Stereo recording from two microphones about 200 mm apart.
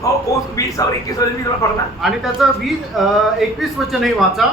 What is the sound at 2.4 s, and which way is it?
Speech, centre (ahead or behind).